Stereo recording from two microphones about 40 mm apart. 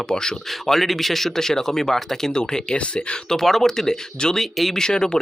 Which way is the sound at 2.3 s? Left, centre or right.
Centre.